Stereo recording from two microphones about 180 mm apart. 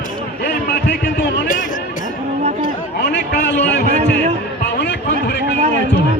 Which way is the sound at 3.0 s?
65° left (ahead or behind).